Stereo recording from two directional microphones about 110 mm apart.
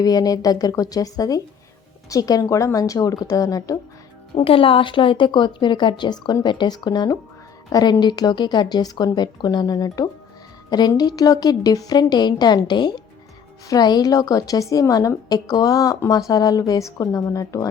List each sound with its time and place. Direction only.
0.0 s a woman's voice: 35° left (ahead or behind)
4.4 s a woman's voice: 55° left (ahead or behind); by 17.7 s 30° left (ahead or behind)